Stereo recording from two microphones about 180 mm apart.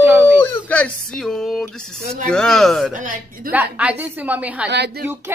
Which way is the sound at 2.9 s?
45° right (ahead or behind).